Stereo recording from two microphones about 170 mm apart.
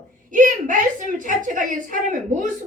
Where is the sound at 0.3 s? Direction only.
50° right (ahead or behind).